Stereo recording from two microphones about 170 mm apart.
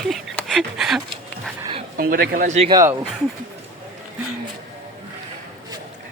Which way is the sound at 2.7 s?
25° right (ahead or behind).